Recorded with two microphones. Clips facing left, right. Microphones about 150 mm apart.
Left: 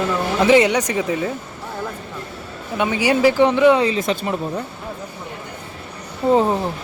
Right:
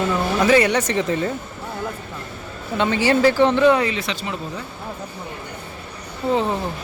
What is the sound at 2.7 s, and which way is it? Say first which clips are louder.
Speech: even; 10° left (ahead or behind).